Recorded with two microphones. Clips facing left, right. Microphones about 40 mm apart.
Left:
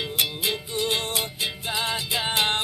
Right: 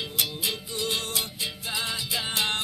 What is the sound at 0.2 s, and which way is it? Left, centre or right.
Music, left.